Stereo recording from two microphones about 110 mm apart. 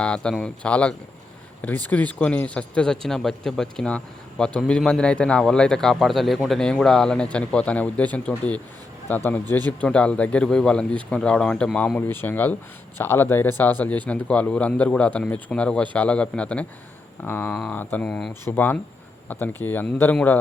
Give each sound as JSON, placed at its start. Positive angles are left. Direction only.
{"t": 0.0, "sound": "speech", "side_deg": 10}